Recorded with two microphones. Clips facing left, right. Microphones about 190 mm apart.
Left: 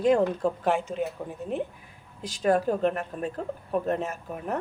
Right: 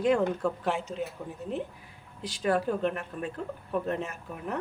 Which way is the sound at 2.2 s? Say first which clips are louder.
Left 4 dB; 45° left (ahead or behind).